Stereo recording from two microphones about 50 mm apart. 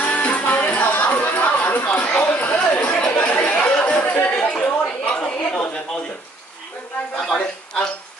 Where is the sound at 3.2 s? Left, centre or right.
Left.